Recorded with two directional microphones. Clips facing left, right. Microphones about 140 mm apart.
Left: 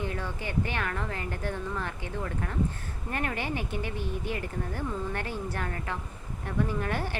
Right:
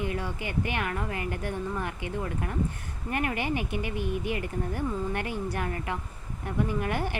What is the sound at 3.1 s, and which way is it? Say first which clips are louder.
Speech: right 3 dB; 15° right (ahead or behind).